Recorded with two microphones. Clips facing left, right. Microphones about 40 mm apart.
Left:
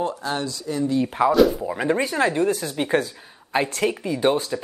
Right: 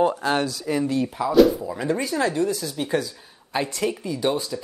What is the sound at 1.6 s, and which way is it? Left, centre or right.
Speech, left.